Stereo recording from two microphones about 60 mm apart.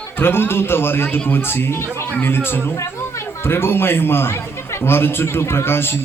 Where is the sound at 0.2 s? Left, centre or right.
Left.